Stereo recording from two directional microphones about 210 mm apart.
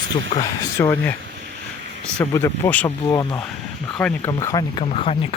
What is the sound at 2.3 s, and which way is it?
Speech, 10° left (ahead or behind).